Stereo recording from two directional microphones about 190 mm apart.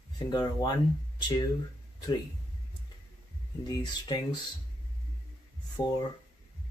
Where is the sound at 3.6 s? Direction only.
20° left (ahead or behind).